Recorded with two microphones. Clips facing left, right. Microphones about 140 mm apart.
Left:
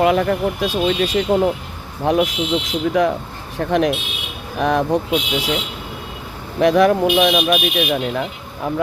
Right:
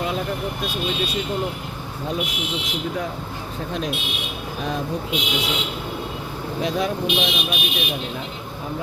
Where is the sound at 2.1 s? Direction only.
70° left (ahead or behind).